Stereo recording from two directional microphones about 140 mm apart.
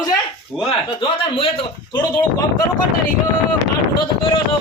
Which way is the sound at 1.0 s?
40° left (ahead or behind).